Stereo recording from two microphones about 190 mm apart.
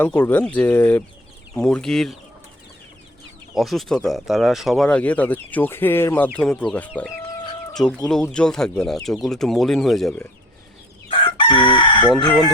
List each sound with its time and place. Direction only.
0.0 s speech: 10° left (ahead or behind)
3.5 s speech: centre (ahead or behind)
11.1 s chicken: 25° left (ahead or behind)